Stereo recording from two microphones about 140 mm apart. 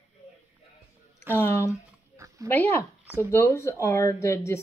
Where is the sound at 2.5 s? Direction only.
15° left (ahead or behind).